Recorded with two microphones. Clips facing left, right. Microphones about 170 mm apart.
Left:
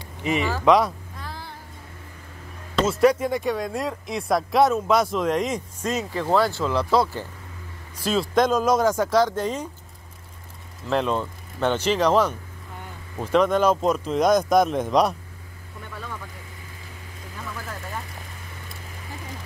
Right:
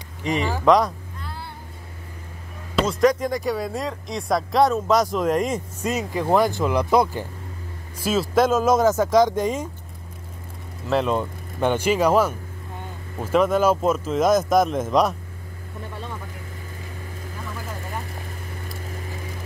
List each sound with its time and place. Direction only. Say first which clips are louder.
0.7 s speech: right 1 dB; centre (ahead or behind)
2.9 s speech: left 1 dB; 10° left (ahead or behind); by 7.2 s 15° right (ahead or behind)
8.0 s speech: right 1 dB; 5° right (ahead or behind)
10.9 s speech: right 2 dB; 5° right (ahead or behind)